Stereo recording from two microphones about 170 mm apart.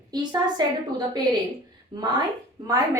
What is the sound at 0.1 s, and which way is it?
A woman's voice, 25° right (ahead or behind).